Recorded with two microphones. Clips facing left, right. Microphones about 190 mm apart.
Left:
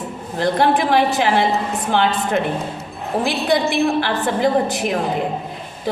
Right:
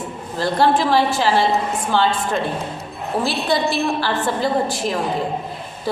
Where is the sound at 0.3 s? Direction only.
20° left (ahead or behind).